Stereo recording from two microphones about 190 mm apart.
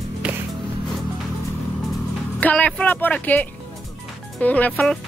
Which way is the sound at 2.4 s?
5° left (ahead or behind).